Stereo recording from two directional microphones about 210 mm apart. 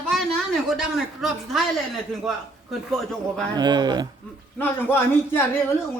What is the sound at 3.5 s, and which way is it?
Speech, 20° right (ahead or behind).